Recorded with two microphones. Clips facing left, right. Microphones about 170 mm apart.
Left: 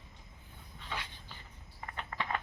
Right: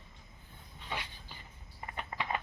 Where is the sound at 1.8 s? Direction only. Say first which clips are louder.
Right 1 dB; 15° right (ahead or behind).